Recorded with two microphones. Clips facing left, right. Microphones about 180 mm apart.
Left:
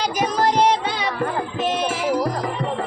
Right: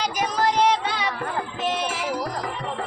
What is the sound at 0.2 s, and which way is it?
Music, 30° left (ahead or behind).